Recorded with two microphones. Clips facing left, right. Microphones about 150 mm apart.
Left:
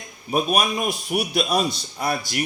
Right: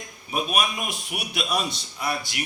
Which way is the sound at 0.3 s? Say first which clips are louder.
Left 5 dB; 40° left (ahead or behind).